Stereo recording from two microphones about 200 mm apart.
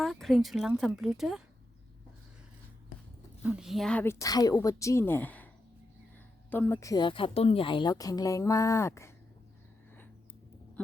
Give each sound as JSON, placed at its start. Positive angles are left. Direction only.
{"t": 0.0, "sound": "speech", "side_deg": 0}
{"t": 3.4, "sound": "a woman's voice", "side_deg": -5}
{"t": 6.5, "sound": "a woman's voice", "side_deg": 10}